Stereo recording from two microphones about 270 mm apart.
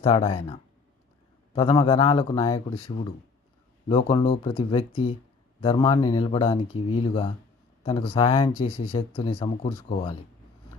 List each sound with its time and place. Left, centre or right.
0.0 s speech: left